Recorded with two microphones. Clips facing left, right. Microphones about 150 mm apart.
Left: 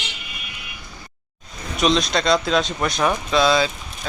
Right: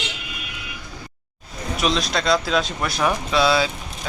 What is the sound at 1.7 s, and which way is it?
Speech, 5° right (ahead or behind).